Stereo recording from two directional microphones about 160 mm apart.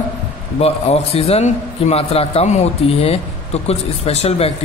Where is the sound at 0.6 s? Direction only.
40° left (ahead or behind).